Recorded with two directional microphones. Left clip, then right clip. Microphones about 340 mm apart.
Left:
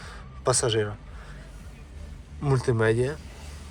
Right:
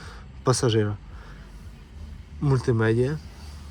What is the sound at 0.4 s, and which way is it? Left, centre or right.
Speech, centre.